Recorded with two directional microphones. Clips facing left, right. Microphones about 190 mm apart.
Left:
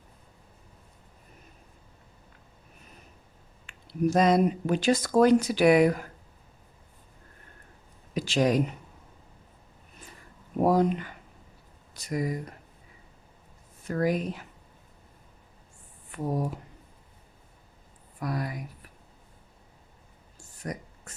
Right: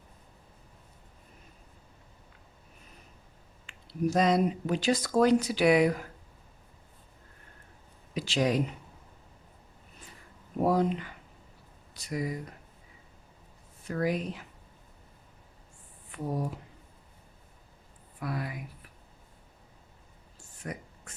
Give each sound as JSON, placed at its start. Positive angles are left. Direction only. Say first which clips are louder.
{"t": 3.7, "sound": "speech", "louder": "left 3 dB", "side_deg": 50}
{"t": 8.1, "sound": "speech", "louder": "left 3 dB", "side_deg": 45}
{"t": 10.6, "sound": "speech", "louder": "left 3 dB", "side_deg": 45}
{"t": 13.8, "sound": "speech", "louder": "left 3 dB", "side_deg": 45}
{"t": 18.2, "sound": "speech", "louder": "left 3 dB", "side_deg": 40}
{"t": 20.4, "sound": "a sound", "louder": "left 3 dB", "side_deg": 40}